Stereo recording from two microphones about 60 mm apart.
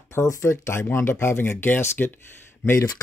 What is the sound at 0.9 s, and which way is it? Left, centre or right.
Speech, left.